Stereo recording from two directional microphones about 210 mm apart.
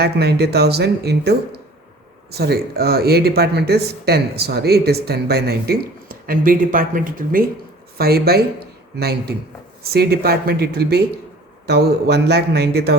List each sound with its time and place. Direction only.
0.0 s speech: 50° right (ahead or behind)
2.3 s speech: 50° right (ahead or behind)